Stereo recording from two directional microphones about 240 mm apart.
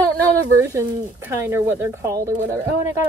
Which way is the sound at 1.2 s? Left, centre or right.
Centre.